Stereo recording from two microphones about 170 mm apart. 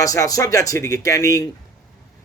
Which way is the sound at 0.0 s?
20° left (ahead or behind).